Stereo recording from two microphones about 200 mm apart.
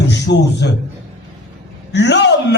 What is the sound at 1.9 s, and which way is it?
Speech, 60° left (ahead or behind).